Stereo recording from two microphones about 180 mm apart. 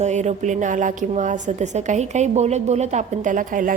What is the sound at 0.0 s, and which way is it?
A woman's voice, 40° right (ahead or behind).